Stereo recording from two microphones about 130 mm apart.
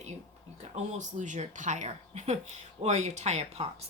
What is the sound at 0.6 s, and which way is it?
Speech, 65° right (ahead or behind).